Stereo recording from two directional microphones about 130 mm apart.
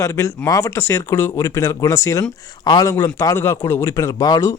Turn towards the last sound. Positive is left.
turn(degrees=25)  # may be behind; listen again after turning